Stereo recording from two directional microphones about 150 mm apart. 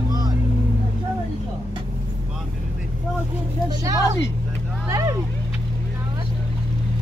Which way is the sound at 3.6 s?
20° right (ahead or behind).